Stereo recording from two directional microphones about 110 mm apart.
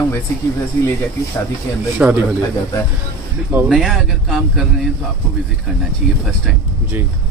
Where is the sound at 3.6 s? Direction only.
Centre (ahead or behind).